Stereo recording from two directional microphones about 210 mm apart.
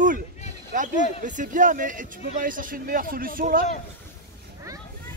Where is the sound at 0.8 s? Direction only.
40° right (ahead or behind).